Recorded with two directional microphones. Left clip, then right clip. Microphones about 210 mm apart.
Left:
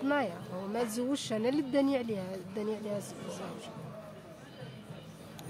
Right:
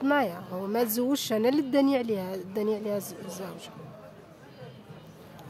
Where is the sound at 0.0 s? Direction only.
50° right (ahead or behind).